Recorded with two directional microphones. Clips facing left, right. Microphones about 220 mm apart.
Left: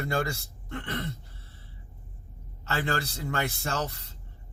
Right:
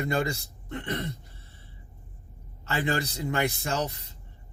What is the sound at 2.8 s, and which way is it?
Speech, 15° right (ahead or behind).